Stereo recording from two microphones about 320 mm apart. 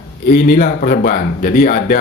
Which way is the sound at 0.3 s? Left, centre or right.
Left.